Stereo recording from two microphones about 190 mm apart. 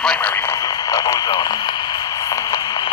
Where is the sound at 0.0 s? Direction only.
5° left (ahead or behind).